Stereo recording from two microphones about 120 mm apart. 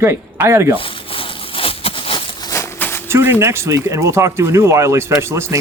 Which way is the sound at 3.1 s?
20° right (ahead or behind).